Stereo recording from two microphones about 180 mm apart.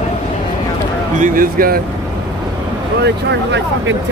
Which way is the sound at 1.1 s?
50° right (ahead or behind).